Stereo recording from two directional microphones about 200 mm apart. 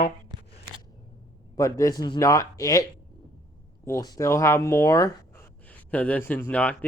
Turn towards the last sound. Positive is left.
turn(degrees=5)  # may be behind; listen again after turning